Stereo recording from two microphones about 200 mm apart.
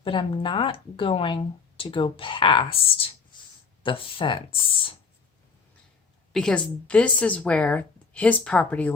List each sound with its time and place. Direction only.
0.0 s speech: 25° left (ahead or behind)
6.3 s a woman's voice: 5° left (ahead or behind)